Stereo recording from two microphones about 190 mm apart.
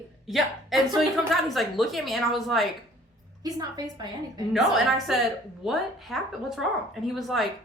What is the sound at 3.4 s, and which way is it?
A woman's voice, 20° right (ahead or behind).